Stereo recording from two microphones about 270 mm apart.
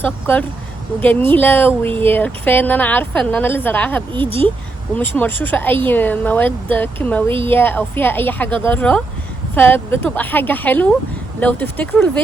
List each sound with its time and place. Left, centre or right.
0.0 s speech: centre
4.1 s speech: centre
4.9 s speech: centre